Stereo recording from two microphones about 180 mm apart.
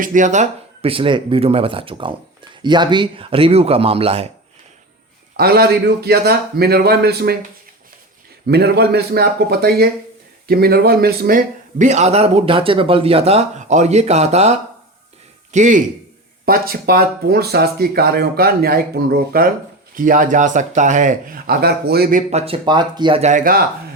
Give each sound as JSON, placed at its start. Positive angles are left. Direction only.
{"t": 0.0, "sound": "a man's voice", "side_deg": -45}
{"t": 5.4, "sound": "speech", "side_deg": -60}
{"t": 8.4, "sound": "a man's voice", "side_deg": -65}
{"t": 16.5, "sound": "speech", "side_deg": -55}
{"t": 22.3, "sound": "speech", "side_deg": -35}
{"t": 23.2, "sound": "speech", "side_deg": -45}